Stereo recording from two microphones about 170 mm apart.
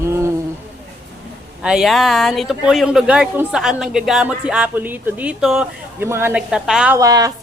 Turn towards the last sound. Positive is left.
turn(degrees=-20)  # may be behind; listen again after turning